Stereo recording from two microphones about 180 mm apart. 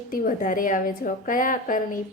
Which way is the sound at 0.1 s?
50° left (ahead or behind).